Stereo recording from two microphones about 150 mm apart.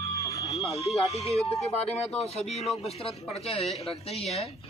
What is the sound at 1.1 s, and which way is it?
Speech, 45° left (ahead or behind).